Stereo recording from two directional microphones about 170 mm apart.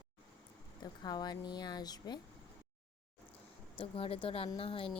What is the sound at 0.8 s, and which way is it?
Speech, 25° left (ahead or behind).